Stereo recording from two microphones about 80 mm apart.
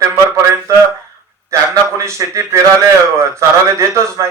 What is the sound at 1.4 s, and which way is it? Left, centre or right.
Speech, right.